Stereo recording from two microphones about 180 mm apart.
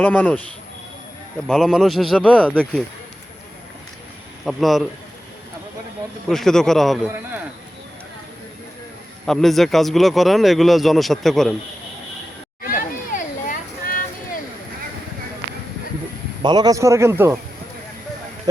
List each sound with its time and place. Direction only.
0.0 s speech: 10° left (ahead or behind)
1.5 s speech: centre (ahead or behind)
4.4 s speech: centre (ahead or behind)
6.2 s speech: centre (ahead or behind)
9.2 s speech: centre (ahead or behind)
12.6 s a sound: 50° left (ahead or behind)
16.4 s a man's voice: 25° right (ahead or behind)